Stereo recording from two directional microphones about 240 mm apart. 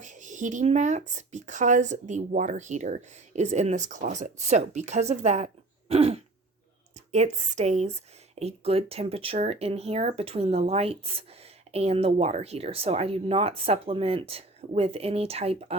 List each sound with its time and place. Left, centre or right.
0.0 s speech: right